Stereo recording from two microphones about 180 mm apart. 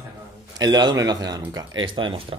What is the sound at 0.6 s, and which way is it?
A woman's voice, 20° right (ahead or behind).